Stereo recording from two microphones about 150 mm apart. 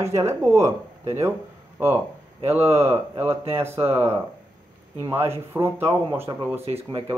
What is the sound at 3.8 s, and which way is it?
Speech, 40° right (ahead or behind).